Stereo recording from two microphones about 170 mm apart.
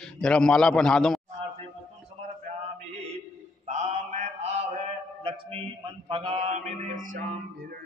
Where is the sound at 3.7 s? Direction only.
40° right (ahead or behind).